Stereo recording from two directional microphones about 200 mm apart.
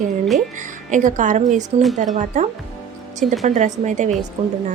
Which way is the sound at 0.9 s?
40° right (ahead or behind).